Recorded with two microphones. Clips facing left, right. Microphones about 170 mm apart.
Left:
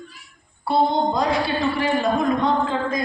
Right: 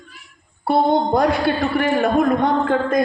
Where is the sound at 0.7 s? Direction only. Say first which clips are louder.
Right 3 dB; 55° right (ahead or behind).